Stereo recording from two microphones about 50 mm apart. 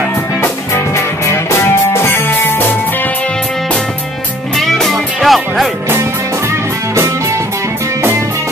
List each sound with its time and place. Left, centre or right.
0.9 s music: left
4.6 s music: centre